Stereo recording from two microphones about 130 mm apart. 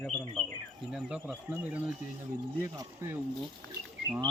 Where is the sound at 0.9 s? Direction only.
5° right (ahead or behind).